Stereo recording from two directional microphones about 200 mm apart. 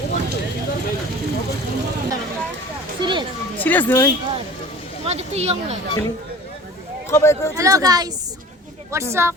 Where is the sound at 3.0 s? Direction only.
25° right (ahead or behind).